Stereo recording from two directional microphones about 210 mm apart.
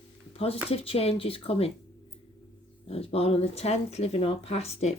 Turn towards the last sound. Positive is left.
turn(degrees=30)  # may be behind; listen again after turning